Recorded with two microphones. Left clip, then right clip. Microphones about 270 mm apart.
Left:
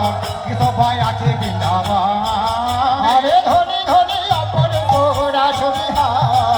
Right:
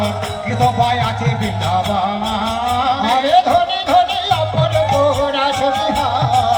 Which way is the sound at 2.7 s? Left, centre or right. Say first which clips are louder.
Left 2 dB; left.